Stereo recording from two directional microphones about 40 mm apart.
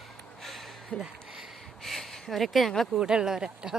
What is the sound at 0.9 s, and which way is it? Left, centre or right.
Speech, left.